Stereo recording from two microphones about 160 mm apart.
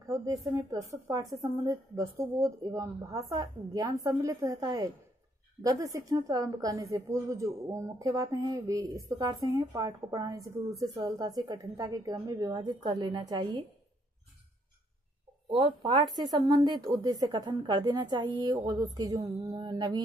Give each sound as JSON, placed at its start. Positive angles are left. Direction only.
{"t": 0.0, "sound": "a woman's voice", "side_deg": -20}
{"t": 15.6, "sound": "a woman's voice", "side_deg": -25}